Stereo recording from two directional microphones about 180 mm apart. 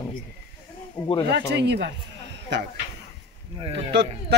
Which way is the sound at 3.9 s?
70° right (ahead or behind).